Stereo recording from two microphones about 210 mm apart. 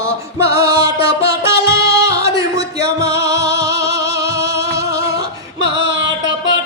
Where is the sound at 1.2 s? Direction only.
50° right (ahead or behind).